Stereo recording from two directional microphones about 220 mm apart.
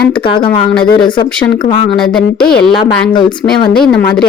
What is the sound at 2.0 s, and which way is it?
Speech, 5° left (ahead or behind).